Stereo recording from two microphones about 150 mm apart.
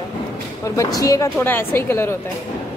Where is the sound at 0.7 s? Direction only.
25° left (ahead or behind).